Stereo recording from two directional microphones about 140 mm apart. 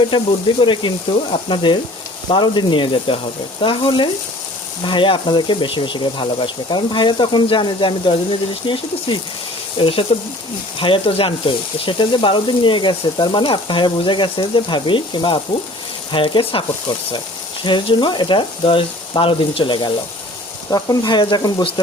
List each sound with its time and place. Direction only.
0.1 s speech: 35° left (ahead or behind)